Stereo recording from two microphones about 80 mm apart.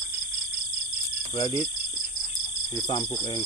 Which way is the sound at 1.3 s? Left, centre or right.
Left.